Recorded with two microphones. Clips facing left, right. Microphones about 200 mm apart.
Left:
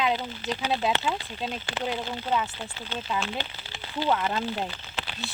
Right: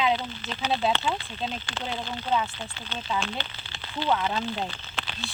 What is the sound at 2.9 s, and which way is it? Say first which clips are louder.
Speech: even; 10° left (ahead or behind).